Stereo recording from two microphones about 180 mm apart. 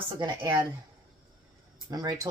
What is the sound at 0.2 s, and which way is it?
Speech, 25° right (ahead or behind).